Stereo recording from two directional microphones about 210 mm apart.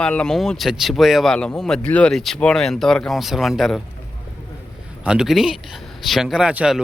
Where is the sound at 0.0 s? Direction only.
5° left (ahead or behind).